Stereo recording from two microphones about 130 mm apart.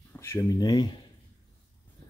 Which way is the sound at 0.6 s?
30° left (ahead or behind).